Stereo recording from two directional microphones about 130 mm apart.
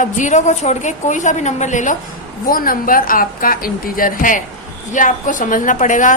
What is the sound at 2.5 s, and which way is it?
A woman's voice, 90° left.